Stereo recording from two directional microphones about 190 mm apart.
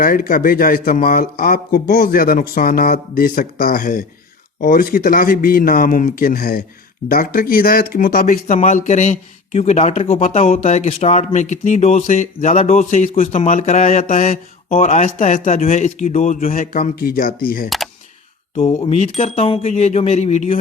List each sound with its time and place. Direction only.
0.0 s speech: 45° left (ahead or behind)
18.5 s speech: 35° left (ahead or behind)